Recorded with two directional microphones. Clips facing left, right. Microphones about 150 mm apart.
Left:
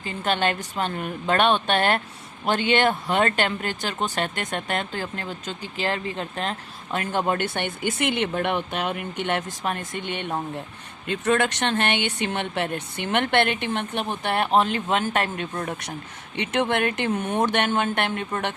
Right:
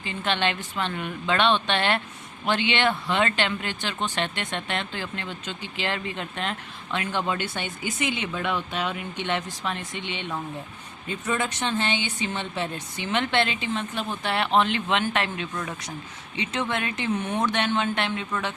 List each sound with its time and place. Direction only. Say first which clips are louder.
0.0 s speech: left 2 dB; 40° left (ahead or behind)
11.1 s speech: left 6 dB; 80° left; by 14.1 s 60° left (ahead or behind)
14.3 s speech: left 2 dB; 45° left (ahead or behind)
16.3 s speech: left 5 dB; 60° left (ahead or behind)